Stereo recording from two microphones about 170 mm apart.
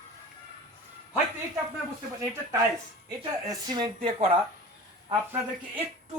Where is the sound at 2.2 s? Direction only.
20° right (ahead or behind).